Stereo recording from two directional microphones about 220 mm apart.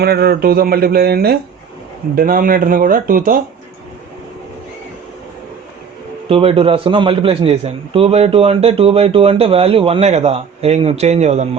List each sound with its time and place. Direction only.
0.0 s speech: 45° right (ahead or behind)
6.2 s a man's voice: 25° right (ahead or behind)